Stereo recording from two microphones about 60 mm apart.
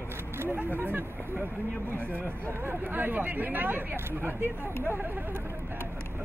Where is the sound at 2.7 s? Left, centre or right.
Right.